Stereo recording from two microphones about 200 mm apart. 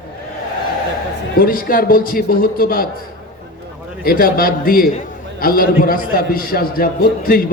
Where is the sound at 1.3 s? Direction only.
45° left (ahead or behind).